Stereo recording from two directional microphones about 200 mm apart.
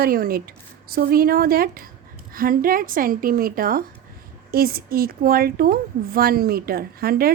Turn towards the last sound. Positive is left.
turn(degrees=-50)  # may be behind; listen again after turning